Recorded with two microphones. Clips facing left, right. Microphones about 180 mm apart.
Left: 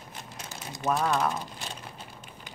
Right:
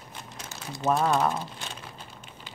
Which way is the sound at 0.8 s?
15° right (ahead or behind).